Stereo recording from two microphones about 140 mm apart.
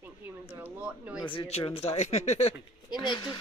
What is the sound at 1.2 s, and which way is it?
Speech, 35° left (ahead or behind).